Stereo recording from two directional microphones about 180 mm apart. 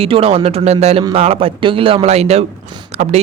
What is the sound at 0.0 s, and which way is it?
Speech, 30° right (ahead or behind).